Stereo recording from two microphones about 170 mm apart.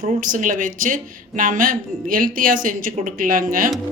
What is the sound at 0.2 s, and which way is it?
Speech, 50° right (ahead or behind).